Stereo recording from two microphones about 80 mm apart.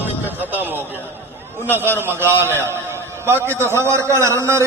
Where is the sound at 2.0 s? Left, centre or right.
Right.